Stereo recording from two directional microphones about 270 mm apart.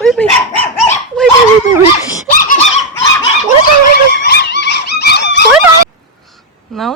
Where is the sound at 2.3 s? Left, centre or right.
Left.